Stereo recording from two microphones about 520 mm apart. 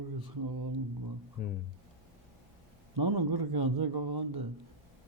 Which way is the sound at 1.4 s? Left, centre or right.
Centre.